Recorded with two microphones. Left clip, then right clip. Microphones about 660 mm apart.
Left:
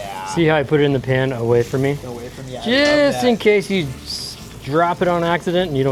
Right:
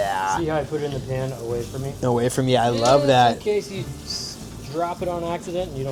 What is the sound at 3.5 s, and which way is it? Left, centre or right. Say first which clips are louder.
Speech: left 8 dB; left.